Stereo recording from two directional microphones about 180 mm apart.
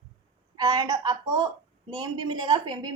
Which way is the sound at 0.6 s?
20° right (ahead or behind).